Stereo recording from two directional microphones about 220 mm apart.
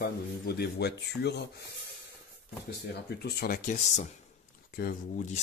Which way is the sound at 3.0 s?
45° left (ahead or behind).